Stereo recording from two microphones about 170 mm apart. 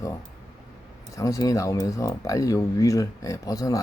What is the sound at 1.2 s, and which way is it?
Speech, 20° left (ahead or behind).